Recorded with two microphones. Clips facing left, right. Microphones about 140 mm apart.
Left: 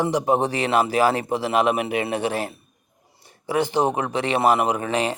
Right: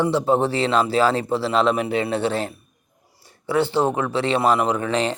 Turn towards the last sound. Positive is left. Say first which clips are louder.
# right 1 dB
turn(degrees=10)  # may be behind; listen again after turning